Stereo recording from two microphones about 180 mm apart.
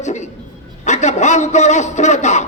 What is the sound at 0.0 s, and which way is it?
Dog, 40° left (ahead or behind).